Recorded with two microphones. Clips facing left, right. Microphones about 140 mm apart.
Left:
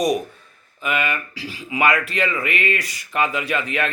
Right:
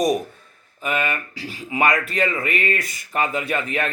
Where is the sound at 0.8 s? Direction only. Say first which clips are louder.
Even; 40° right (ahead or behind).